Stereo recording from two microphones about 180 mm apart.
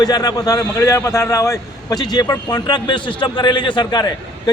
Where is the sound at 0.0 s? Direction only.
20° left (ahead or behind).